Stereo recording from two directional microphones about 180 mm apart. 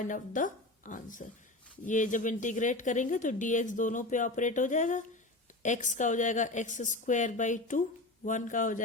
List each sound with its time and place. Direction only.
0.0 s a woman's voice: 45° left (ahead or behind)